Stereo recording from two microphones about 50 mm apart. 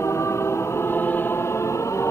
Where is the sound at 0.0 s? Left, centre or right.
Left.